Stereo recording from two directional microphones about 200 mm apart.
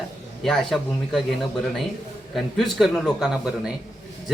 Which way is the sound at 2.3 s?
Centre (ahead or behind).